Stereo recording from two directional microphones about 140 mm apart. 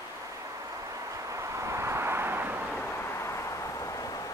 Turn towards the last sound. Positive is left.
turn(degrees=25)  # may be behind; listen again after turning